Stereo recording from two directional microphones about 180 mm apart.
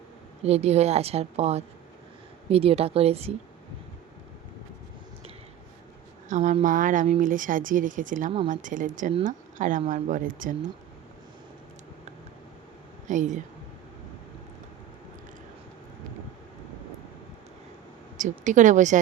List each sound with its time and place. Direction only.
0.4 s a woman's voice: 35° right (ahead or behind)
6.2 s a woman's voice: 40° right (ahead or behind)
13.1 s a woman's voice: 45° right (ahead or behind)
18.2 s a woman's voice: 45° right (ahead or behind)